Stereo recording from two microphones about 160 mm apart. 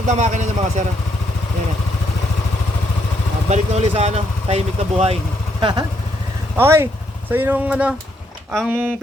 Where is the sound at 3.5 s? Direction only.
40° right (ahead or behind).